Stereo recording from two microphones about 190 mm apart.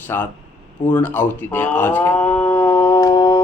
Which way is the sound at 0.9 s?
10° left (ahead or behind).